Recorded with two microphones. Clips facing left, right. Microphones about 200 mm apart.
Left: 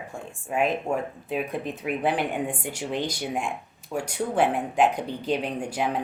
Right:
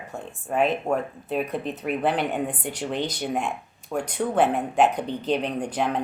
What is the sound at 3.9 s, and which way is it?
Speech, 10° left (ahead or behind).